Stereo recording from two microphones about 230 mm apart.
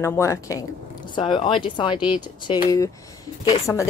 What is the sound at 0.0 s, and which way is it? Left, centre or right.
A woman's voice, centre.